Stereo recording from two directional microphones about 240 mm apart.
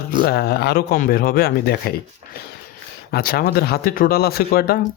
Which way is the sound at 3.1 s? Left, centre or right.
Left.